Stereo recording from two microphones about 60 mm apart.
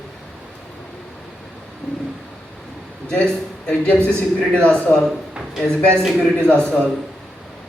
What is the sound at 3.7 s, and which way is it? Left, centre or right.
Speech, centre.